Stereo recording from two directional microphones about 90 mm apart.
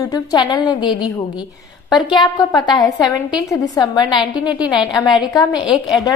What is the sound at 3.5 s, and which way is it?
Speech, 45° left (ahead or behind).